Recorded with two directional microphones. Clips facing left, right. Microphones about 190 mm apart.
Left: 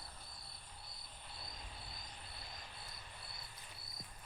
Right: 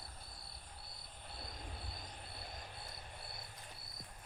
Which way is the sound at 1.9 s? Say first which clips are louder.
Right 3 dB; 55° right (ahead or behind).